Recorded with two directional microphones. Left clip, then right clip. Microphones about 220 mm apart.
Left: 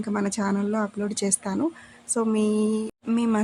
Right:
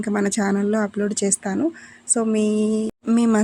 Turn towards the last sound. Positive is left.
turn(degrees=-25)  # may be behind; listen again after turning